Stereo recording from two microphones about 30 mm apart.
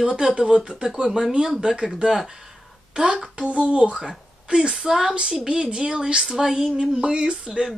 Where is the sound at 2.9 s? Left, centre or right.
Right.